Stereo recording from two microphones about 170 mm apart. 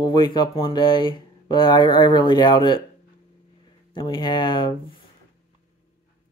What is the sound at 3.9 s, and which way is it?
Speech, 30° left (ahead or behind).